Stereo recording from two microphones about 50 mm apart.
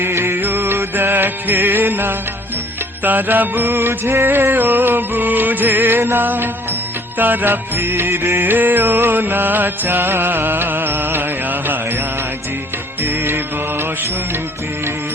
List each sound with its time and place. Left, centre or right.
0.0 s music: right
8.5 s music: right
13.0 s mantra: right